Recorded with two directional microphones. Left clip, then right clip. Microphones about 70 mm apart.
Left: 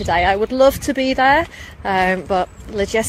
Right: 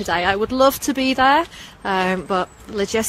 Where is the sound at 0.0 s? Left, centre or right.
Right.